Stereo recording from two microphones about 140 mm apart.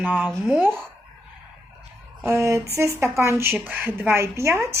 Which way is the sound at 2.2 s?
20° right (ahead or behind).